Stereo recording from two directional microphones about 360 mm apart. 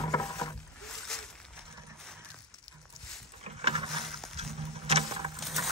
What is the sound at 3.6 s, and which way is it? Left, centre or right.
Rowboat, centre.